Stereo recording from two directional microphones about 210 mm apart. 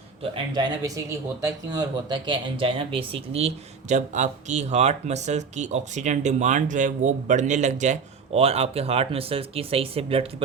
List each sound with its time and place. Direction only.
0.2 s speech: 25° right (ahead or behind)